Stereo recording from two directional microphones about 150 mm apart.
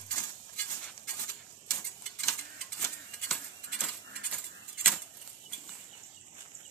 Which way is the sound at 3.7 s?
Centre (ahead or behind).